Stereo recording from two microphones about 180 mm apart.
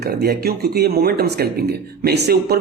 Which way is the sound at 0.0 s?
60° right (ahead or behind).